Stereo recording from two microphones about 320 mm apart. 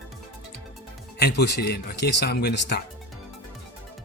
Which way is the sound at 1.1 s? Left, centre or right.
Left.